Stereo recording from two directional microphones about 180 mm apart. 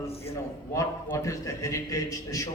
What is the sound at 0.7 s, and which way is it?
A man's voice, 15° left (ahead or behind).